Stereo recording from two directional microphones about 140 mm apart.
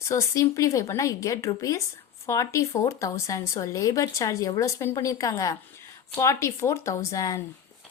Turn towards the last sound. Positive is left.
turn(degrees=25)  # may be behind; listen again after turning